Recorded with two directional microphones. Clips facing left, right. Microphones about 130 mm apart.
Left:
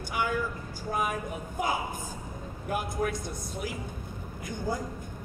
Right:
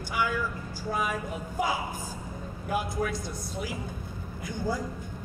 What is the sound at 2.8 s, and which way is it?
Speech, 50° left (ahead or behind).